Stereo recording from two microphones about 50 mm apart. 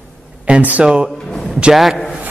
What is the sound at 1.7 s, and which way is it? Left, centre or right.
Speech, centre.